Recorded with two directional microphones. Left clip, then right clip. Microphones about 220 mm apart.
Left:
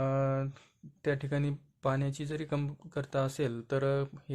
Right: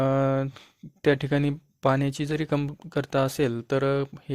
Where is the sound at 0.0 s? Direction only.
45° right (ahead or behind).